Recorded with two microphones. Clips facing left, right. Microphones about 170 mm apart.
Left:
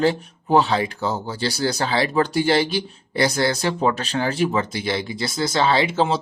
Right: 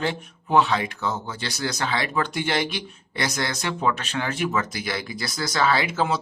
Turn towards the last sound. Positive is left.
turn(degrees=25)  # may be behind; listen again after turning